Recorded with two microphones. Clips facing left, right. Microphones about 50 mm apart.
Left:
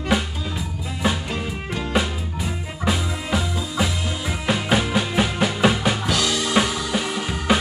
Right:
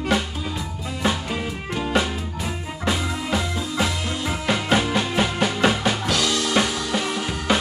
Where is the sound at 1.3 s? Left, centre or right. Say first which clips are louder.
Even; centre.